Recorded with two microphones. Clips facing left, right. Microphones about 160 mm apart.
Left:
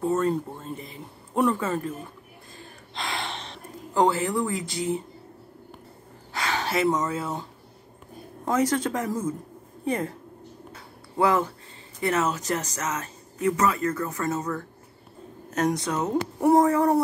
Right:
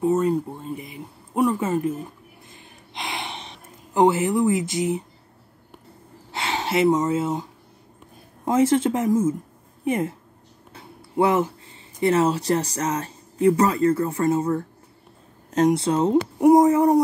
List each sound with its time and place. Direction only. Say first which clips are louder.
0.0 s speech: right 4 dB; 15° right (ahead or behind)
2.9 s gasp: even; 20° right (ahead or behind)
6.3 s speech: right 3 dB; 25° right (ahead or behind)
8.5 s speech: right 5 dB; 25° right (ahead or behind)
10.7 s a sound: right 5 dB; 25° right (ahead or behind)
12.0 s speech: right 6 dB; 30° right (ahead or behind)
16.3 s a sound: right 4 dB; 20° right (ahead or behind)